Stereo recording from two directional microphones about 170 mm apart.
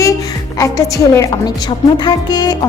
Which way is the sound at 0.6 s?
20° left (ahead or behind).